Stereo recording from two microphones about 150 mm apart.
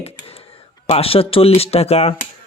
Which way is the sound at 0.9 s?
40° left (ahead or behind).